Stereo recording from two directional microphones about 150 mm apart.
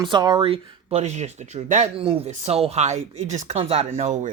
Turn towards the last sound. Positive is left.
turn(degrees=-50)  # may be behind; listen again after turning